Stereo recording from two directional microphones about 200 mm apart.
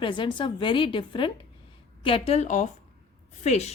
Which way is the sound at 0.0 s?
25° left (ahead or behind).